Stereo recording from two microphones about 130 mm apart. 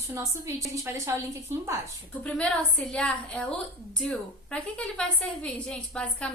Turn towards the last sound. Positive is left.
turn(degrees=10)  # may be behind; listen again after turning